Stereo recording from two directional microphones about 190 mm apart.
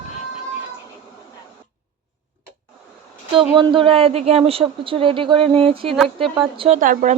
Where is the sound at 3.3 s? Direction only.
25° right (ahead or behind).